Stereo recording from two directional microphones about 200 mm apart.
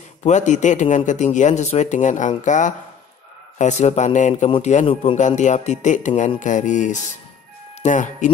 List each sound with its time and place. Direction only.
0.2 s a man's voice: 35° left (ahead or behind)